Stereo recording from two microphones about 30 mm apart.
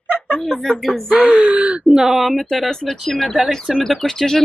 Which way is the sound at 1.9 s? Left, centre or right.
Centre.